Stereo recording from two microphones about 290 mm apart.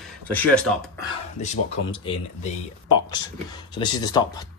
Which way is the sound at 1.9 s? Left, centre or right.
Centre.